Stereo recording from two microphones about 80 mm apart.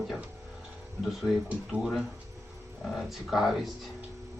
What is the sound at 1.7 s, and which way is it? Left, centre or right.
Speech, centre.